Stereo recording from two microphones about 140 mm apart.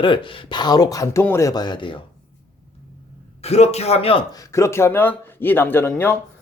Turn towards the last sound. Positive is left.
turn(degrees=15)  # may be behind; listen again after turning